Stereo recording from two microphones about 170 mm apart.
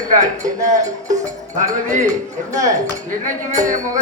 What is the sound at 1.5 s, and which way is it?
A man's voice, 45° right (ahead or behind).